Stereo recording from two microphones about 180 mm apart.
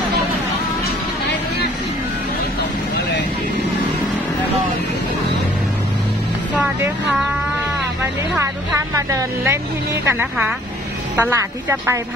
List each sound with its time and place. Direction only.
6.5 s music: 10° right (ahead or behind)
8.0 s a sound: 15° right (ahead or behind)
10.0 s a woman's voice: 10° right (ahead or behind)